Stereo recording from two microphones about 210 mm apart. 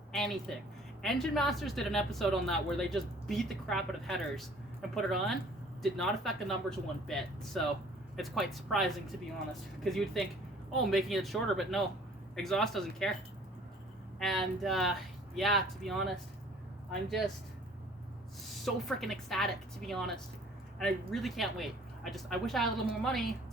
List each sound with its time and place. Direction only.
0.1 s a sound: 5° left (ahead or behind)
1.0 s speech: centre (ahead or behind)
14.2 s speech: centre (ahead or behind)
18.4 s speech: centre (ahead or behind)